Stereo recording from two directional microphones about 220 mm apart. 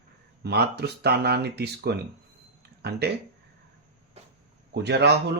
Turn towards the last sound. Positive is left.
turn(degrees=-50)  # may be behind; listen again after turning